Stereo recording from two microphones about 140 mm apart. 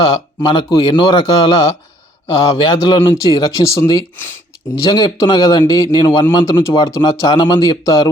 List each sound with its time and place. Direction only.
0.4 s a man's voice: 35° left (ahead or behind)
6.4 s speech: 20° left (ahead or behind)
7.0 s a man's voice: 35° left (ahead or behind)
7.9 s speech: 25° left (ahead or behind)